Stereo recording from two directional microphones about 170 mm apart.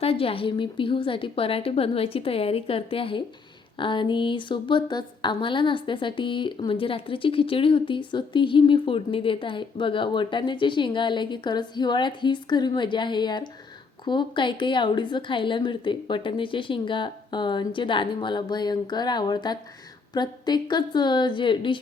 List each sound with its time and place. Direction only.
0.0 s a woman's voice: 35° left (ahead or behind)